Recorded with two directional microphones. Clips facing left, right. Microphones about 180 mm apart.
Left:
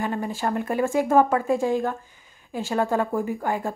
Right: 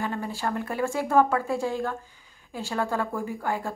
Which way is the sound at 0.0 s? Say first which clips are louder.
Left 3 dB; 15° left (ahead or behind).